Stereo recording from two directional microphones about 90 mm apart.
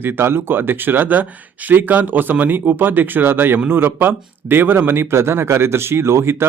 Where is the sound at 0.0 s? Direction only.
25° right (ahead or behind).